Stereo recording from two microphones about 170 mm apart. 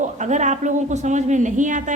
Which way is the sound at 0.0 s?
45° right (ahead or behind).